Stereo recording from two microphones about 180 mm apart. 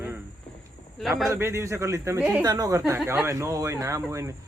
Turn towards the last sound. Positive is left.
turn(degrees=-15)  # may be behind; listen again after turning